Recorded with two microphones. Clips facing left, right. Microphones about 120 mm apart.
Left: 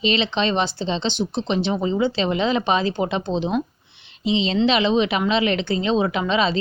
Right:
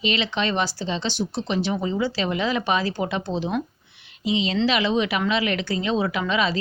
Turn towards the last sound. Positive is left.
turn(degrees=25)  # may be behind; listen again after turning